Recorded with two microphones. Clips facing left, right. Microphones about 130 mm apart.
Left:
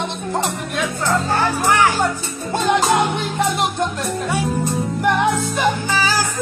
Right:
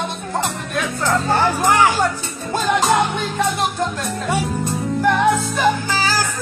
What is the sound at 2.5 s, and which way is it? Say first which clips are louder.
Music: even; 25° left (ahead or behind).